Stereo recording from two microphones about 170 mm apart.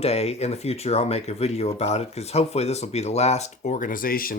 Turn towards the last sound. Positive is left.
turn(degrees=60)  # may be behind; listen again after turning